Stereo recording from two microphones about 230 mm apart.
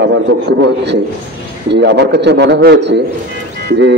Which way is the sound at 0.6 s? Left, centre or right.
Right.